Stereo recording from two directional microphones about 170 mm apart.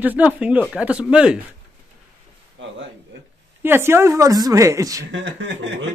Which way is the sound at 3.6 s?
15° right (ahead or behind).